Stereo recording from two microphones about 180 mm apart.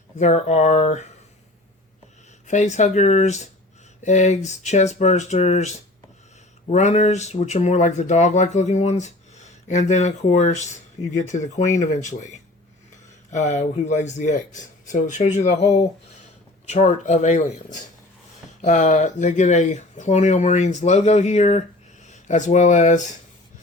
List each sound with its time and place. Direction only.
0.2 s speech: 40° left (ahead or behind)
2.5 s speech: 40° left (ahead or behind)
13.3 s speech: 40° left (ahead or behind)